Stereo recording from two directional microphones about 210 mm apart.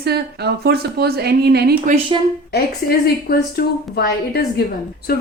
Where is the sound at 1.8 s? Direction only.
30° right (ahead or behind).